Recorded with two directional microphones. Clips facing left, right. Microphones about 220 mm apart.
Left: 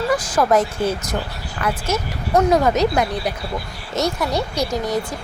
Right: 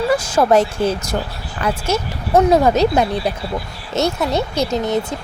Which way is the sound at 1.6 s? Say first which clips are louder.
Right 3 dB; 30° right (ahead or behind).